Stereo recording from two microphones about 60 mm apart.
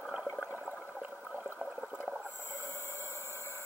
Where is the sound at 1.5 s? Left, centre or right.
Centre.